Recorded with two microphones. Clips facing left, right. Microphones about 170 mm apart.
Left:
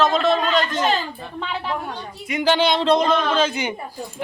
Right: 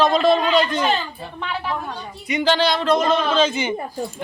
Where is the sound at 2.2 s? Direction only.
Centre (ahead or behind).